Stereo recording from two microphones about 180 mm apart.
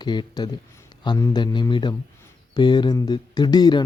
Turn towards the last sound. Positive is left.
turn(degrees=25)  # may be behind; listen again after turning